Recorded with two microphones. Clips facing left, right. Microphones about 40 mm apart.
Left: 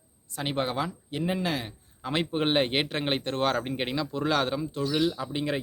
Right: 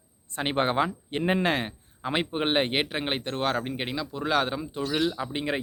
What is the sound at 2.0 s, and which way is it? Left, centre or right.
Speech, centre.